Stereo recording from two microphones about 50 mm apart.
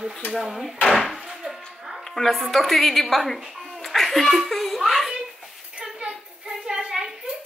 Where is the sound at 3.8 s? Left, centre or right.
Centre.